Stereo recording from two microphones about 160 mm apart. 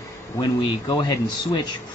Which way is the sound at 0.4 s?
25° left (ahead or behind).